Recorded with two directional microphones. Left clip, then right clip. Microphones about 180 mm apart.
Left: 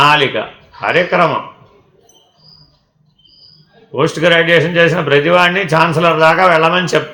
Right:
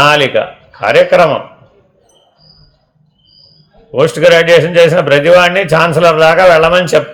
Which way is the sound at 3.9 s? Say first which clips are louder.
Right 5 dB; 50° right (ahead or behind).